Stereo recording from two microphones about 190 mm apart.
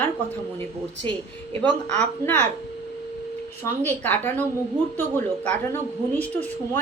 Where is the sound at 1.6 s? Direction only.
5° left (ahead or behind).